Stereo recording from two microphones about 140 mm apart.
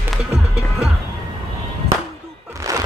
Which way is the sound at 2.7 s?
25° right (ahead or behind).